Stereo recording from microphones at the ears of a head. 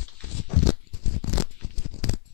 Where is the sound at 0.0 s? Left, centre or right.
Left.